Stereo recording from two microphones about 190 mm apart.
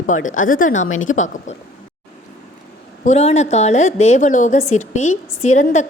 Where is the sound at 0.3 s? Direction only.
45° left (ahead or behind).